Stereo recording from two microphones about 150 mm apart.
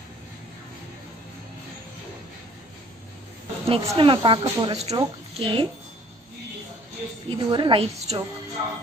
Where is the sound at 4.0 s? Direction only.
35° right (ahead or behind).